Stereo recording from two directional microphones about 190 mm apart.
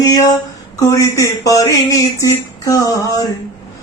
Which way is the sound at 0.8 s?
20° left (ahead or behind).